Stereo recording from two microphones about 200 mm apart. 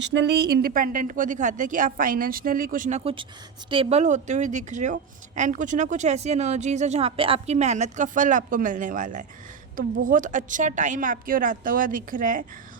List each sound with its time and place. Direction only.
0.0 s a woman's voice: 60° right (ahead or behind); by 12.5 s 40° right (ahead or behind)